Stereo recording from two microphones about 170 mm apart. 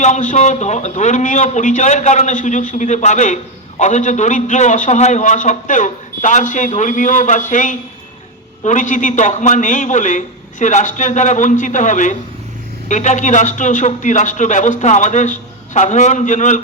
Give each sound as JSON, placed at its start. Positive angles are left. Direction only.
{"t": 0.0, "sound": "a man's voice", "side_deg": 45}